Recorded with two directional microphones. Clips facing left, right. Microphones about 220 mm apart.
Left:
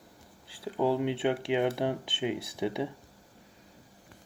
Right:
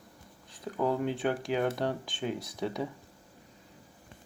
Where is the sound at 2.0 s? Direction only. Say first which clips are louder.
Left 3 dB; 25° left (ahead or behind).